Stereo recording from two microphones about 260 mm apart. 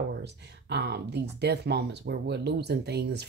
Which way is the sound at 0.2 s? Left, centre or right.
Right.